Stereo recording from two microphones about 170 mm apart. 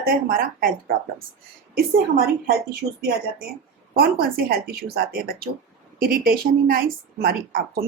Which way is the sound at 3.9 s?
65° right (ahead or behind).